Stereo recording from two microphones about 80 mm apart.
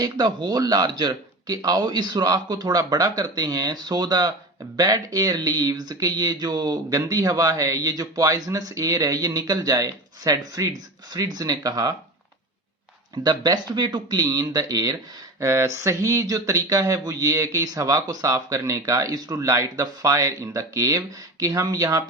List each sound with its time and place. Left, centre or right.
0.0 s speech: right
13.2 s speech: right
15.4 s speech: right